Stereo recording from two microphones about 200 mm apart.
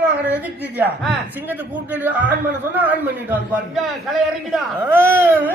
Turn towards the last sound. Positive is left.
turn(degrees=-10)  # may be behind; listen again after turning